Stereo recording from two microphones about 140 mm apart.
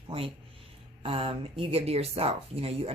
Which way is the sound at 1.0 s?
40° right (ahead or behind).